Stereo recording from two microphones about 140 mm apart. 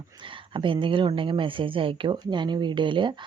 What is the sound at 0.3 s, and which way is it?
Speech, 35° right (ahead or behind).